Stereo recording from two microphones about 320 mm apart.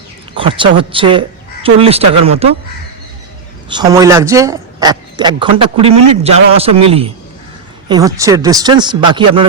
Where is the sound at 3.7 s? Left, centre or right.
Centre.